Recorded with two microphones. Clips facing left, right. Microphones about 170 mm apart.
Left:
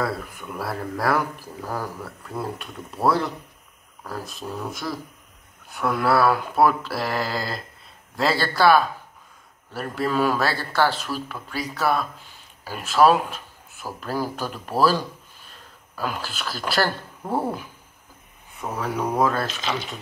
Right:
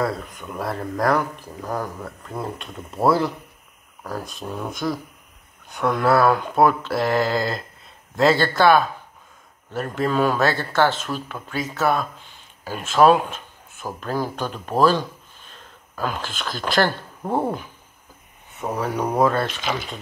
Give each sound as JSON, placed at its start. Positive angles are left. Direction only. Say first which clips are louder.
{"t": 0.0, "sound": "mantra", "louder": "right 2 dB", "side_deg": 5}
{"t": 12.6, "sound": "speech", "louder": "right 3 dB", "side_deg": 5}
{"t": 13.0, "sound": "a sound", "louder": "right 2 dB", "side_deg": 5}
{"t": 13.9, "sound": "speech", "louder": "right 1 dB", "side_deg": 5}
{"t": 17.2, "sound": "speech", "louder": "right 3 dB", "side_deg": -20}
{"t": 18.6, "sound": "mantra", "louder": "right 2 dB", "side_deg": 0}